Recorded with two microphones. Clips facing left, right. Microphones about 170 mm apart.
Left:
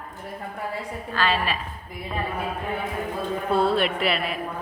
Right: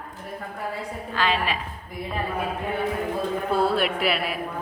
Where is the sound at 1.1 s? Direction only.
15° right (ahead or behind).